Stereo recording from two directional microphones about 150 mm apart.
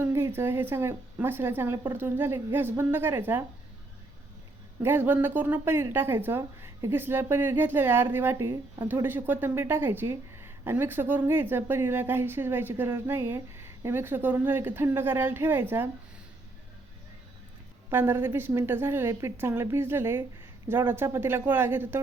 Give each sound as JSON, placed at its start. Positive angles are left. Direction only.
{"t": 0.0, "sound": "speech", "side_deg": -15}
{"t": 4.8, "sound": "speech", "side_deg": -15}
{"t": 17.9, "sound": "speech", "side_deg": -15}